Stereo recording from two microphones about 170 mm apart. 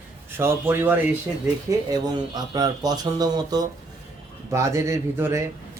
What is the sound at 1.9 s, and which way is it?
Speech, 25° right (ahead or behind).